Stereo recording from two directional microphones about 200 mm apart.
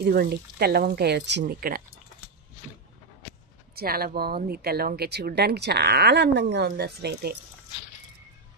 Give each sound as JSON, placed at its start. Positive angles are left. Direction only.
{"t": 0.0, "sound": "speech", "side_deg": -50}
{"t": 1.4, "sound": "speech", "side_deg": -45}
{"t": 3.7, "sound": "speech", "side_deg": -50}